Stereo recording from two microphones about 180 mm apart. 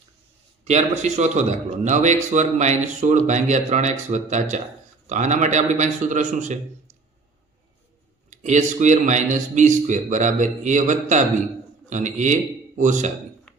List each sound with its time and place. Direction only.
0.6 s a man's voice: 40° right (ahead or behind)
8.3 s a man's voice: 40° right (ahead or behind)
13.5 s a sound: 5° left (ahead or behind)